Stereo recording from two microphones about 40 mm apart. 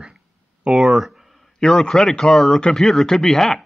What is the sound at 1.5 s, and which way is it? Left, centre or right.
Speech, centre.